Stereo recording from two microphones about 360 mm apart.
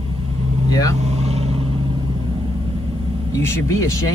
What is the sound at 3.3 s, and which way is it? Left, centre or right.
Speech, centre.